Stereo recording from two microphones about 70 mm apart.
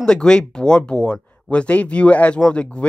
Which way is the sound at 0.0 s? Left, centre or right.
Centre.